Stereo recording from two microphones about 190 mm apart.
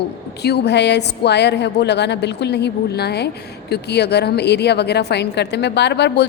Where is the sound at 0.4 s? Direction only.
60° left (ahead or behind).